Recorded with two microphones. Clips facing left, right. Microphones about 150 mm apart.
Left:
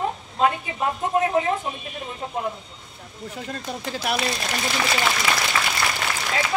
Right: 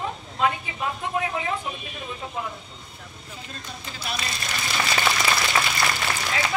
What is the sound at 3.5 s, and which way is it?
Speech, 70° left (ahead or behind).